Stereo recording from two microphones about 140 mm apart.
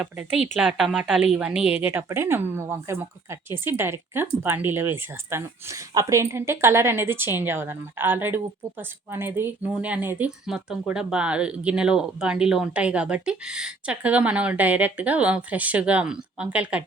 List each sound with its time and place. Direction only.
0.0 s speech: 5° right (ahead or behind)